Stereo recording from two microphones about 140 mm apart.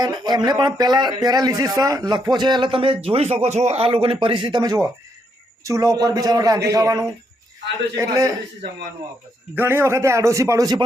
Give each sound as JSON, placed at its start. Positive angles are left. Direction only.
{"t": 0.0, "sound": "a man's voice", "side_deg": -30}
{"t": 9.6, "sound": "a man's voice", "side_deg": -15}